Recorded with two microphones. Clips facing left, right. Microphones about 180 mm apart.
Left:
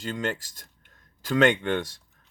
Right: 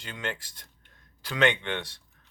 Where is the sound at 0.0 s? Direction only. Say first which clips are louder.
Left 6 dB; 45° left (ahead or behind).